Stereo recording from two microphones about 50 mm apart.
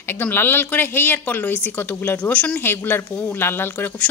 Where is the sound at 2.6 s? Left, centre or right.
Left.